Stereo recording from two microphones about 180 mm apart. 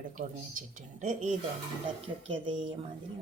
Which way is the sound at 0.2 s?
45° right (ahead or behind).